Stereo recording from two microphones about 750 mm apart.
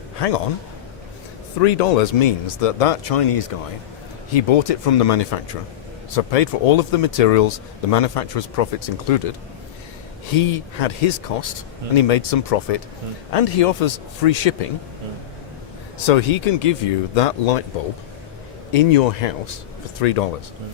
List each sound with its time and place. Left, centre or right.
0.2 s a man's voice: left
1.6 s a man's voice: left
10.3 s a man's voice: left
16.0 s a man's voice: left
18.7 s a man's voice: left